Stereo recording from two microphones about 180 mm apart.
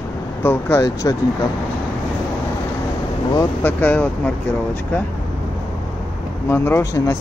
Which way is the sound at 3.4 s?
10° left (ahead or behind).